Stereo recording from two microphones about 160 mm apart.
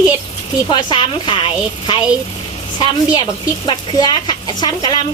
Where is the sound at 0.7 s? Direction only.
30° left (ahead or behind).